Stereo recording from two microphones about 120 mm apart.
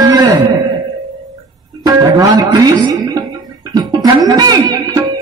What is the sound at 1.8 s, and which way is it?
Speech, 30° right (ahead or behind).